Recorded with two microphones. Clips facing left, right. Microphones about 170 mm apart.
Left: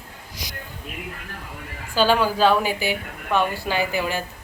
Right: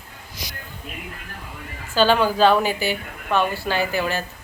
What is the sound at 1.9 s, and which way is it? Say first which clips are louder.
A woman's voice: right 1 dB; 10° left (ahead or behind).